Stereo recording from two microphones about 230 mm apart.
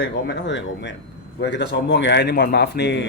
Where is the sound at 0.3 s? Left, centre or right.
Left.